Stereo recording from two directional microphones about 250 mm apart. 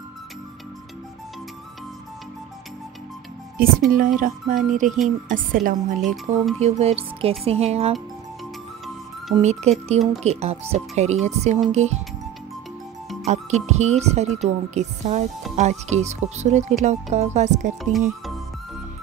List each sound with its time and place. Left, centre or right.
3.5 s speech: right
9.3 s speech: right
13.2 s speech: right